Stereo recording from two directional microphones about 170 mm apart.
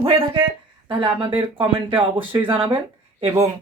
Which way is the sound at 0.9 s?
25° right (ahead or behind).